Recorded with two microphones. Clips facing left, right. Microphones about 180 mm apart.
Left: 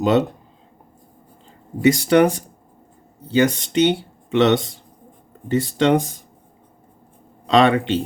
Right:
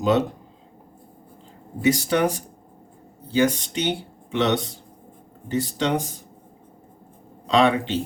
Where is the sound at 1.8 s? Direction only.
70° left (ahead or behind).